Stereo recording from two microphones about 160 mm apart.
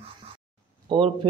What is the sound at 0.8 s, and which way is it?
Speech, 35° right (ahead or behind).